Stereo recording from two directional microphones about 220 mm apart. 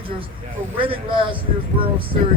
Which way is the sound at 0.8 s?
25° right (ahead or behind).